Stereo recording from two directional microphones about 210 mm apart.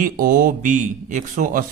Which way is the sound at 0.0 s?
40° right (ahead or behind).